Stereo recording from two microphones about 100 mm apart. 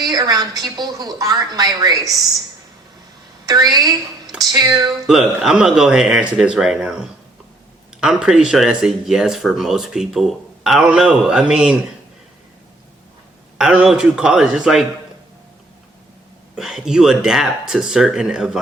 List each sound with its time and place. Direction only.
0.0 s a woman's voice: 40° right (ahead or behind)
3.4 s a woman's voice: 40° right (ahead or behind)
5.0 s speech: 5° right (ahead or behind)
13.6 s speech: 10° right (ahead or behind)
16.6 s speech: 5° right (ahead or behind)